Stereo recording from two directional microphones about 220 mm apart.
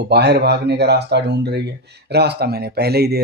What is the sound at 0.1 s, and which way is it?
Speech, 50° right (ahead or behind).